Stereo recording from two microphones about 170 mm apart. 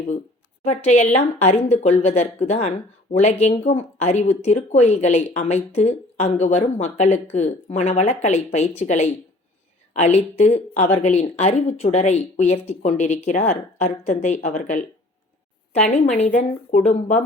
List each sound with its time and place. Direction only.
0.6 s speech: 40° left (ahead or behind)